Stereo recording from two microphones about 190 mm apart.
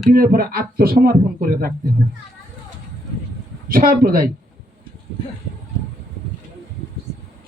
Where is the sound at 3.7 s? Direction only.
50° right (ahead or behind).